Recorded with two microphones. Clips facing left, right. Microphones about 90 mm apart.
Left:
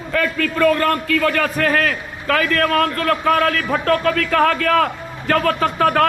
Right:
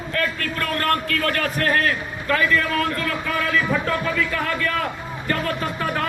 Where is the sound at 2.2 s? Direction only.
90° left.